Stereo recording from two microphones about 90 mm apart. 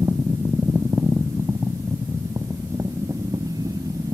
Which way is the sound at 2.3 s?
35° right (ahead or behind).